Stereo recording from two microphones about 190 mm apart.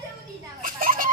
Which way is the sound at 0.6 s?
45° right (ahead or behind).